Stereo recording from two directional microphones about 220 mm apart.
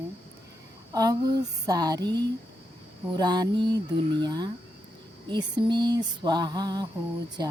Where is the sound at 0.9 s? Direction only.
15° right (ahead or behind).